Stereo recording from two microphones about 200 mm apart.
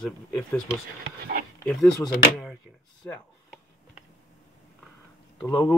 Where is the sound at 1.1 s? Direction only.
50° right (ahead or behind).